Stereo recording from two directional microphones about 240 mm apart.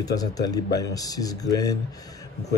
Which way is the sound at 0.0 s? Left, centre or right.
Centre.